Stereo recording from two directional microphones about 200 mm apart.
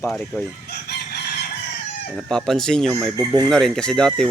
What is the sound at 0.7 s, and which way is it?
Chicken, 55° left (ahead or behind).